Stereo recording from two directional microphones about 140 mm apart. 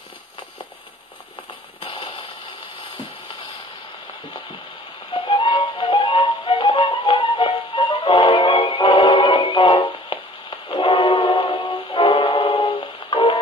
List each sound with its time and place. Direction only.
1.8 s music: 40° left (ahead or behind)
5.1 s music: 30° left (ahead or behind)